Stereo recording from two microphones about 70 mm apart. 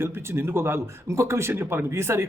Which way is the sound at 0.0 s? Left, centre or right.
Right.